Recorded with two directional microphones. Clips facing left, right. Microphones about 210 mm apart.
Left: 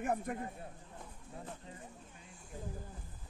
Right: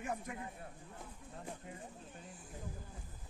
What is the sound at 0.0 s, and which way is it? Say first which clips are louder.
Speech: left 6 dB; 55° left (ahead or behind).